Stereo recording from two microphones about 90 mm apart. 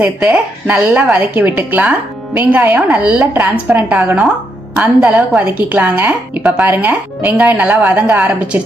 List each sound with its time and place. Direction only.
0.0 s speech: 15° right (ahead or behind)